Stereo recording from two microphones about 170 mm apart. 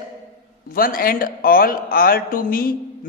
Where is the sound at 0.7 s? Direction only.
55° left (ahead or behind).